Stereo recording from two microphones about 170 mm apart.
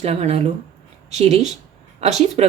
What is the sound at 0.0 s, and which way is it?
A woman's voice, 40° right (ahead or behind).